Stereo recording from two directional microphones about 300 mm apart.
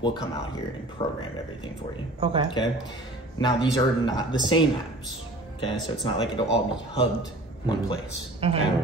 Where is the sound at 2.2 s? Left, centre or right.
Centre.